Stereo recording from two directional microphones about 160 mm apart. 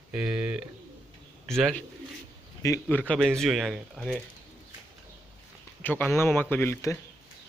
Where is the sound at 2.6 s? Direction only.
20° left (ahead or behind).